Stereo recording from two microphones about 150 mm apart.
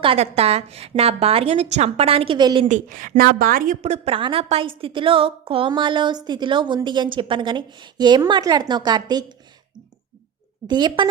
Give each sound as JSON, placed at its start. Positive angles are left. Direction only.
{"t": 0.0, "sound": "a woman's voice", "side_deg": -40}
{"t": 2.6, "sound": "speech", "side_deg": -60}
{"t": 3.8, "sound": "a woman's voice", "side_deg": -50}
{"t": 10.7, "sound": "a woman's voice", "side_deg": -30}